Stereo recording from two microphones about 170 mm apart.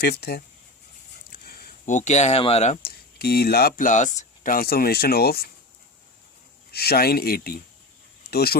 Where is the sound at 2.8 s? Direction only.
70° left (ahead or behind).